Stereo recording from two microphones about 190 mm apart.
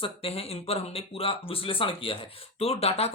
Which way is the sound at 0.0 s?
30° left (ahead or behind).